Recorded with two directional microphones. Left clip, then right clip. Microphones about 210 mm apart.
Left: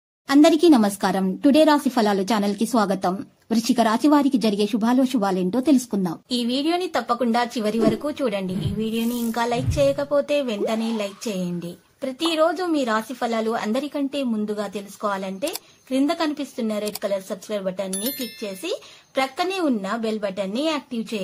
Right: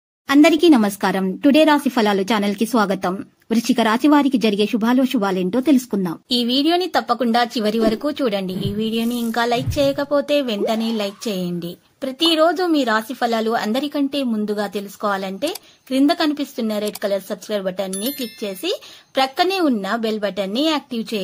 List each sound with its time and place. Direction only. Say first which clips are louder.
0.3 s a woman's voice: right 2 dB; 15° right (ahead or behind)
17.9 s speech: right 3 dB; centre (ahead or behind)
18.4 s a woman's voice: right 5 dB; 25° right (ahead or behind)